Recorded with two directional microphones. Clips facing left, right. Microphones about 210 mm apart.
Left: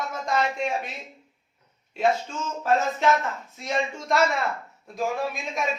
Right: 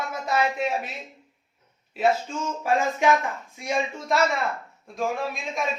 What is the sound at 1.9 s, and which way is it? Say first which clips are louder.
Speech: right 1 dB; 5° right (ahead or behind).